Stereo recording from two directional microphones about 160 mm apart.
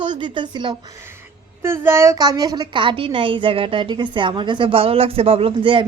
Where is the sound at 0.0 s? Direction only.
30° right (ahead or behind).